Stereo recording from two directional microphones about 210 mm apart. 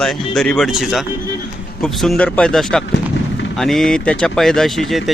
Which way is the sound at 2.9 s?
60° left (ahead or behind).